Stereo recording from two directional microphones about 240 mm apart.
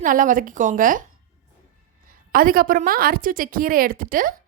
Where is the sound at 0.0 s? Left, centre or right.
Right.